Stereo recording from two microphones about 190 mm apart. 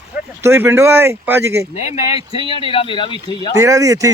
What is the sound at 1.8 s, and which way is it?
Speech, 35° left (ahead or behind).